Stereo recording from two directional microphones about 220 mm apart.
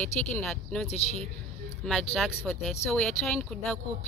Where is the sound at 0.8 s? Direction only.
30° left (ahead or behind).